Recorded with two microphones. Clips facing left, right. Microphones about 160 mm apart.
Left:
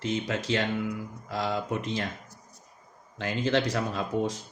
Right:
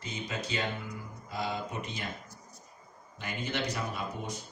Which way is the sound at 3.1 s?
90° left.